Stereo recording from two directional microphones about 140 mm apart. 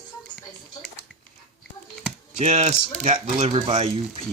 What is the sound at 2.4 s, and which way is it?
Speech, 50° right (ahead or behind).